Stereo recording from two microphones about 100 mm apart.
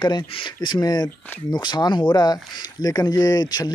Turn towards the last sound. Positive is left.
turn(degrees=40)  # may be behind; listen again after turning